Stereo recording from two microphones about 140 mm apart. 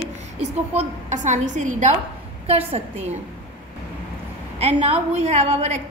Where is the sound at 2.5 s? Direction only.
45° right (ahead or behind).